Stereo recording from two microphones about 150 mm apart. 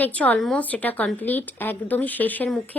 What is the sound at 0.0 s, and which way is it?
Speech, 10° left (ahead or behind).